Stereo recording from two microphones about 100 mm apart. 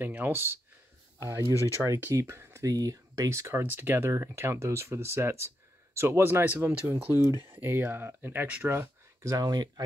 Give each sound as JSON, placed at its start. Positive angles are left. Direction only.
{"t": 0.0, "sound": "speech", "side_deg": -20}
{"t": 1.5, "sound": "speech", "side_deg": 30}
{"t": 1.8, "sound": "speech", "side_deg": -20}